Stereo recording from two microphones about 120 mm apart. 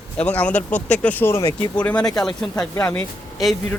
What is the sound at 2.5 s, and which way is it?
Speech, 10° left (ahead or behind).